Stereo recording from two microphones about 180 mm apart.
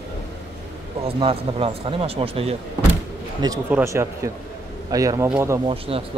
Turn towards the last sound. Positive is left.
turn(degrees=-30)  # may be behind; listen again after turning